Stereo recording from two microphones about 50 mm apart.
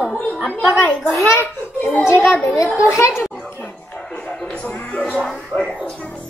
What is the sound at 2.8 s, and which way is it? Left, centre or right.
Speech, left.